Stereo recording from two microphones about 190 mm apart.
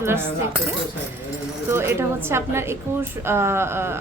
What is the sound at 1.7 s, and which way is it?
A woman's voice, 15° right (ahead or behind).